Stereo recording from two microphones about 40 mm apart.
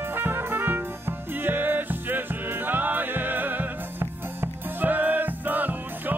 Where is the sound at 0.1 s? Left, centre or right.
Right.